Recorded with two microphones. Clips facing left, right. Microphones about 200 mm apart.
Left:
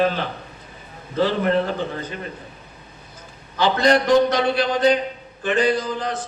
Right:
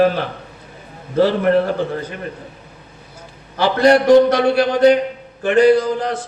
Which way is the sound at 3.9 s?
60° right (ahead or behind).